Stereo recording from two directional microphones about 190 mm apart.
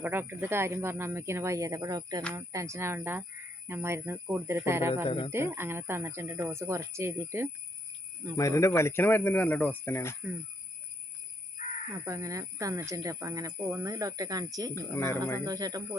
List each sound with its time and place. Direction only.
0.0 s speech: 10° right (ahead or behind)
5.0 s speech: 30° left (ahead or behind)
5.3 s speech: 15° right (ahead or behind)
8.4 s speech: 15° left (ahead or behind)
11.6 s caw: 35° left (ahead or behind)
12.0 s speech: 15° right (ahead or behind)
14.8 s speech: 15° left (ahead or behind)
15.4 s speech: 20° right (ahead or behind)